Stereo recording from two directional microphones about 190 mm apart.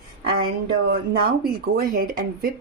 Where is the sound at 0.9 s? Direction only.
55° right (ahead or behind).